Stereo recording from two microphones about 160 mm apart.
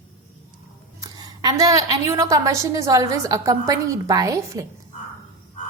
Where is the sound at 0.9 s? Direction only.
20° right (ahead or behind).